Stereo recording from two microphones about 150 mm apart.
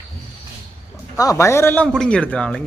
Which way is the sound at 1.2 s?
20° left (ahead or behind).